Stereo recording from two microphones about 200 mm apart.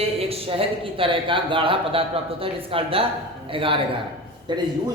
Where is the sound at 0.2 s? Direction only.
30° right (ahead or behind).